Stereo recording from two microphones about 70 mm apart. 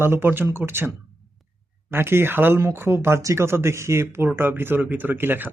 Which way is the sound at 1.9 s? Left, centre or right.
Right.